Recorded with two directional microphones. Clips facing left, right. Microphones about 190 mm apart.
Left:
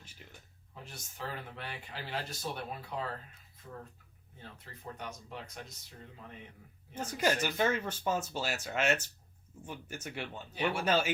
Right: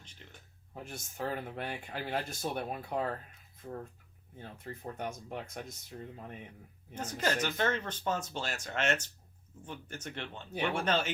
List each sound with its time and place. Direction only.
0.0 s a sound: 5° left (ahead or behind)
0.7 s speech: 50° right (ahead or behind)
4.4 s speech: 50° right (ahead or behind)
6.9 s speech: 10° left (ahead or behind)